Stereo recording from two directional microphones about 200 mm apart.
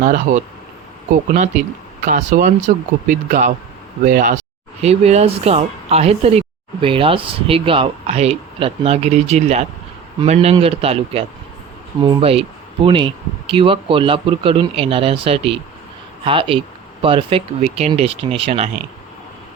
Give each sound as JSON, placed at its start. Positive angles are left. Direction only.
{"t": 0.0, "sound": "speech", "side_deg": -40}
{"t": 2.0, "sound": "speech", "side_deg": -40}
{"t": 4.8, "sound": "speech", "side_deg": -35}